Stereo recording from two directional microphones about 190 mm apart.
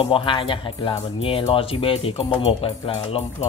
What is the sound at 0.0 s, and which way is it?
Speech, 25° left (ahead or behind).